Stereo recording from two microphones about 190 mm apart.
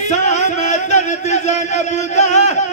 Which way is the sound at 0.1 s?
40° left (ahead or behind).